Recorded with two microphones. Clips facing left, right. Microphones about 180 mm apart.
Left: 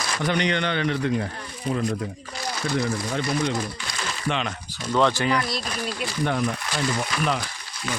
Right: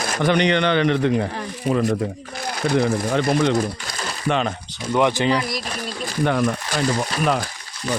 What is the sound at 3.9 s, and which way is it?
Crumpling, 40° right (ahead or behind).